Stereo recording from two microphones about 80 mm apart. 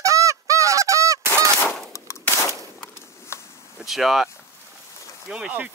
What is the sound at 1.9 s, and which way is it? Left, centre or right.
Gunshot, left.